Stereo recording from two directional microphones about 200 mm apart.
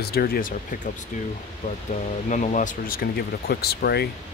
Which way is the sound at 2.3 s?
40° left (ahead or behind).